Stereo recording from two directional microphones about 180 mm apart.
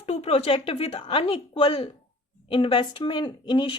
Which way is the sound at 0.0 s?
35° left (ahead or behind).